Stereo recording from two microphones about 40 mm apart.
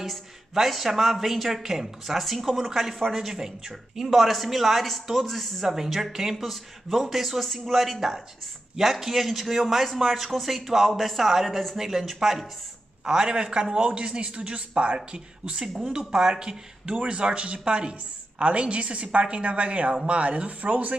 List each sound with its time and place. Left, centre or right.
0.0 s a woman's voice: centre
5.7 s a woman's voice: centre
13.0 s a woman's voice: centre; by 20.9 s right